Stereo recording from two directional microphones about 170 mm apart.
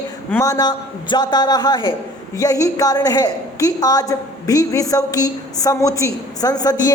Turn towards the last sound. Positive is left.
turn(degrees=20)  # may be behind; listen again after turning